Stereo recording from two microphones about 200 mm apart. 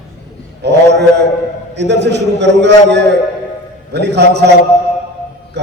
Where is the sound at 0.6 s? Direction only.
55° right (ahead or behind).